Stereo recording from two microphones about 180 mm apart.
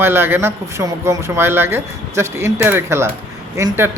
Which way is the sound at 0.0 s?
10° right (ahead or behind).